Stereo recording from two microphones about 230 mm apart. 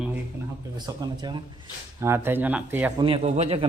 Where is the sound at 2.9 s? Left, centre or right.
Right.